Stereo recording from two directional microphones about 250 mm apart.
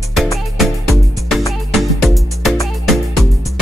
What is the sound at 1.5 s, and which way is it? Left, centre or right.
Music, centre.